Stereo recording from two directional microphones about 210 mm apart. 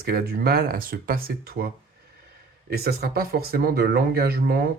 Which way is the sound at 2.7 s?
45° right (ahead or behind).